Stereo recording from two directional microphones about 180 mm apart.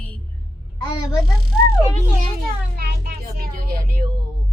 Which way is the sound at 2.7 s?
60° right (ahead or behind).